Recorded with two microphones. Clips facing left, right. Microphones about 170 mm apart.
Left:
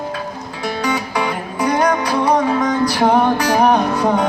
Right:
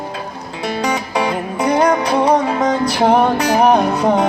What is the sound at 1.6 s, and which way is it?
Music, 20° right (ahead or behind).